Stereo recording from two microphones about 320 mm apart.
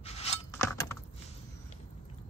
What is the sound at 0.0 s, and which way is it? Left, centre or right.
Keys jangling, centre.